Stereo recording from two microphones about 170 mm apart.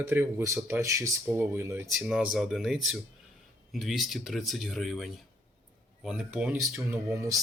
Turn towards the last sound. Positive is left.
turn(degrees=-20)  # may be behind; listen again after turning